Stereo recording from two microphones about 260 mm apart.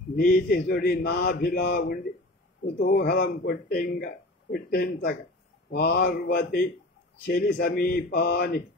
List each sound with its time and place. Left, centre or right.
0.1 s speech: left